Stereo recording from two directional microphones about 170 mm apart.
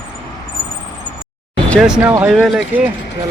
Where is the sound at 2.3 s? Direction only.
Centre (ahead or behind).